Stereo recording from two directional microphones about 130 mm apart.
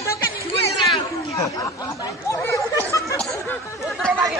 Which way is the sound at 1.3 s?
25° left (ahead or behind).